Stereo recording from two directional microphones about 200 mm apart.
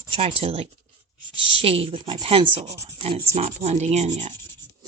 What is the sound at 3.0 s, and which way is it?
Speech, 30° right (ahead or behind).